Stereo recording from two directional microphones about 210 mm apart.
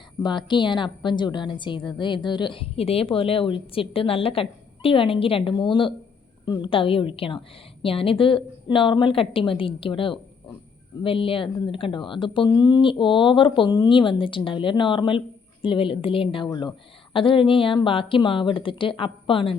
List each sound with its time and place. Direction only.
0.2 s a woman's voice: 20° left (ahead or behind)